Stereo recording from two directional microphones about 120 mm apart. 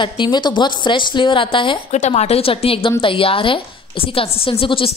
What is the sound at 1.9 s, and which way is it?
A woman's voice, 75° left (ahead or behind).